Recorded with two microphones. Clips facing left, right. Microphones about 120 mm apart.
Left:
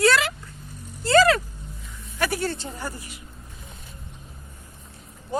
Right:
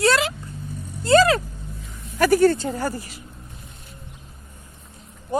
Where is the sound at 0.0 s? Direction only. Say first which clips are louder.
Right 1 dB; 25° right (ahead or behind).